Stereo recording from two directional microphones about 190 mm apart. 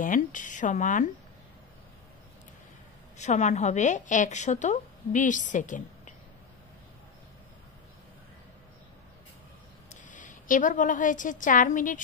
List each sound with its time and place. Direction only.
0.0 s speech: 45° left (ahead or behind)
3.2 s a woman's voice: 40° left (ahead or behind)
9.8 s a woman's voice: 40° left (ahead or behind)